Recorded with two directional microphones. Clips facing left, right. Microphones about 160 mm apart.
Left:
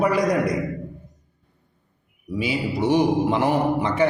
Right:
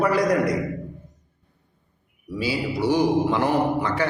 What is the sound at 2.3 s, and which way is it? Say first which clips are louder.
A man's voice: left 1 dB; 20° left (ahead or behind).